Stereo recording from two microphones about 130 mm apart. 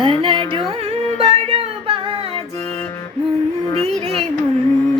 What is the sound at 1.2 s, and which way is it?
Music, 50° right (ahead or behind).